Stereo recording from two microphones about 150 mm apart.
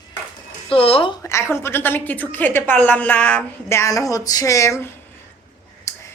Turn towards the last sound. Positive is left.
turn(degrees=20)  # may be behind; listen again after turning